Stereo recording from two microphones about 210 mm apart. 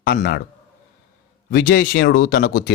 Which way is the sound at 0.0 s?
50° left (ahead or behind).